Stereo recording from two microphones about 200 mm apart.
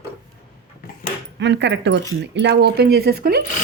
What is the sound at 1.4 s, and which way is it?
Speech, 60° right (ahead or behind).